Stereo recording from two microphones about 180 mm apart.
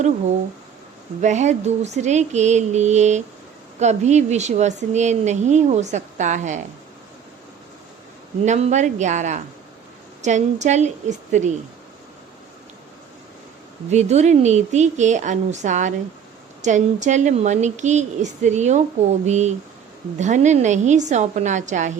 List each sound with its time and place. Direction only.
1.2 s a woman's voice: 40° right (ahead or behind)
8.4 s a woman's voice: 40° right (ahead or behind)
13.9 s a woman's voice: 40° right (ahead or behind)